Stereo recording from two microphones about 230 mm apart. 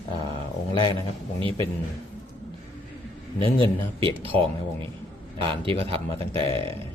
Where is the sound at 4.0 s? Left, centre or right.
Right.